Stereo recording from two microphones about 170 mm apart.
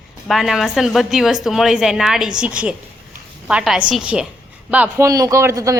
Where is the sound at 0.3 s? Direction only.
Centre (ahead or behind).